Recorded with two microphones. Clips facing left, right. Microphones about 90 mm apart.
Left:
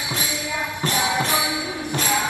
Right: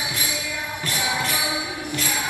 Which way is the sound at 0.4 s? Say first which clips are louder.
Left 4 dB; 20° left (ahead or behind).